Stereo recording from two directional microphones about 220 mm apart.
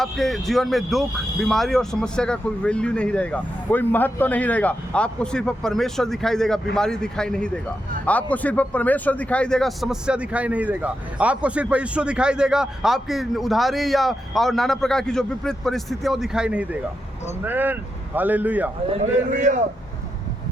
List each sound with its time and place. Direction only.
0.0 s speech: centre (ahead or behind)
19.3 s a man's voice: 35° right (ahead or behind)